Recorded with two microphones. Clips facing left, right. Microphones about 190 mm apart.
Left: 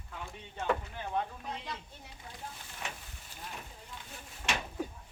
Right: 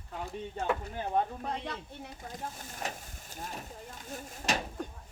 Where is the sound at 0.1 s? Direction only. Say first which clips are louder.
Right 7 dB; 35° right (ahead or behind).